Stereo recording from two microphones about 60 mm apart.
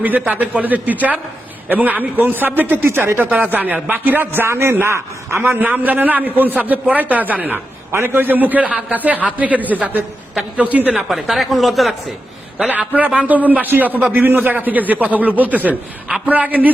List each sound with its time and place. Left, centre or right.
0.0 s a man's voice: right
5.5 s a man's voice: right
11.1 s speech: centre
12.9 s a man's voice: right